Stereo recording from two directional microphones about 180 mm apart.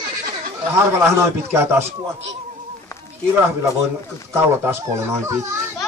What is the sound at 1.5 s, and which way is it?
Speech, 15° right (ahead or behind).